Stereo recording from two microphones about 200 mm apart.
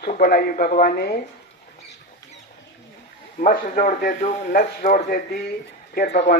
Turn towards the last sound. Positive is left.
turn(degrees=45)  # may be behind; listen again after turning